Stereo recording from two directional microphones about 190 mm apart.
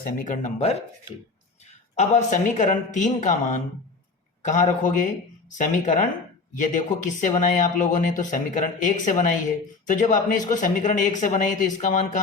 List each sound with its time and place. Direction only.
0.0 s speech: 45° left (ahead or behind)
2.0 s speech: 40° left (ahead or behind)